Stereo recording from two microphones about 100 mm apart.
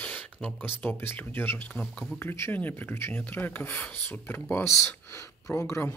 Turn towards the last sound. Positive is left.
turn(degrees=25)  # may be behind; listen again after turning